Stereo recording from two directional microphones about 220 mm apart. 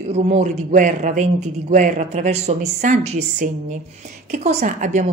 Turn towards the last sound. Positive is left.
turn(degrees=-35)  # may be behind; listen again after turning